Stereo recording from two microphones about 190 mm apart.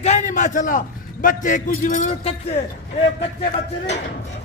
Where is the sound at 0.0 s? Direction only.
40° left (ahead or behind).